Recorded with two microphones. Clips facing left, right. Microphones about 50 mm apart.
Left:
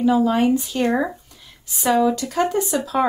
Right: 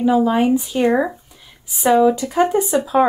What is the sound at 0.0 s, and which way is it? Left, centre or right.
Speech, centre.